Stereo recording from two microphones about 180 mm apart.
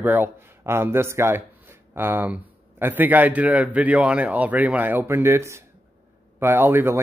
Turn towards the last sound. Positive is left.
turn(degrees=-10)  # may be behind; listen again after turning